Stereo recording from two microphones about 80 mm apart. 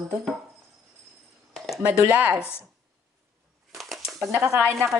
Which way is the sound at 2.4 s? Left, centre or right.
Left.